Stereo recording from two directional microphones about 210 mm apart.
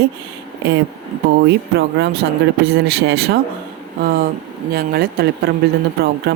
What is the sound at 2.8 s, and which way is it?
Speech, 55° right (ahead or behind).